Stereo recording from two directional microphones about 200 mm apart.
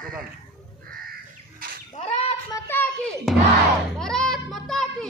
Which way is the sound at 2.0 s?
30° left (ahead or behind).